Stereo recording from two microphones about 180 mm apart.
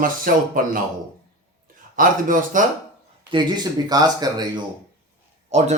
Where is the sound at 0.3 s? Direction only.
50° right (ahead or behind).